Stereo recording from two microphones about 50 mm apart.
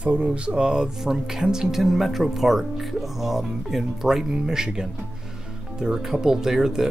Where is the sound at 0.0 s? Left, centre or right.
Right.